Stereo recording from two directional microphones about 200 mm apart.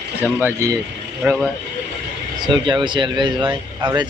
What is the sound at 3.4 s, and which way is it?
Speech, 10° right (ahead or behind).